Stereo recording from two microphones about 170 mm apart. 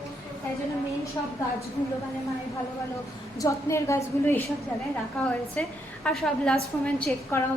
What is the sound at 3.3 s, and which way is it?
A woman's voice, 20° left (ahead or behind).